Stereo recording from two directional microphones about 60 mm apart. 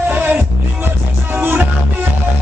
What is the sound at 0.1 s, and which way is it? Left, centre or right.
Music, right.